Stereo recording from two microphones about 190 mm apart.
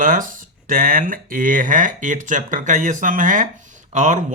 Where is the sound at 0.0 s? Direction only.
45° right (ahead or behind).